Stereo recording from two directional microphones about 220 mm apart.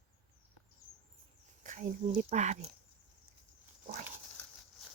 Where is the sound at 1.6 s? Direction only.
35° right (ahead or behind).